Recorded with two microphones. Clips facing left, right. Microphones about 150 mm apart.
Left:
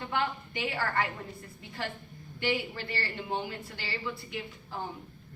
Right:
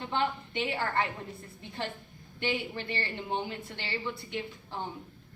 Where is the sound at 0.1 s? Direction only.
25° right (ahead or behind).